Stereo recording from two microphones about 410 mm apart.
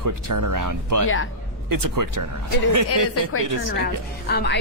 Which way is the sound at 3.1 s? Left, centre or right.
Left.